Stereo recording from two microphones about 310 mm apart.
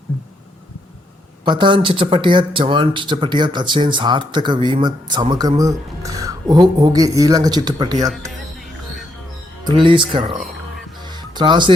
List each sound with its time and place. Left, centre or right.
1.5 s speech: centre
8.3 s music: centre
9.6 s speech: centre
11.0 s music: centre